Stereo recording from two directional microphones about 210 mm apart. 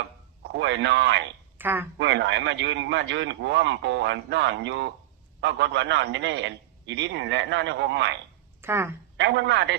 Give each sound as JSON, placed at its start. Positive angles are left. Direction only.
{"t": 0.4, "sound": "a man's voice", "side_deg": -55}
{"t": 1.5, "sound": "speech", "side_deg": -10}
{"t": 2.0, "sound": "a man's voice", "side_deg": -55}
{"t": 8.6, "sound": "a woman's voice", "side_deg": -10}
{"t": 9.1, "sound": "a man's voice", "side_deg": -55}